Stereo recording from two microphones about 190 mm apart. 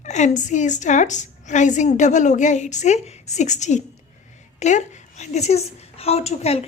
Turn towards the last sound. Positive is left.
turn(degrees=35)  # may be behind; listen again after turning